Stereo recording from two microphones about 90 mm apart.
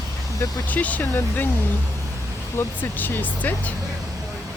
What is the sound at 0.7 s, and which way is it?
Speech, 15° left (ahead or behind).